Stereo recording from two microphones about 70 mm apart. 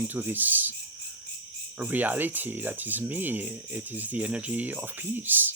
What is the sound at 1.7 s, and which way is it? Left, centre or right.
Speech, right.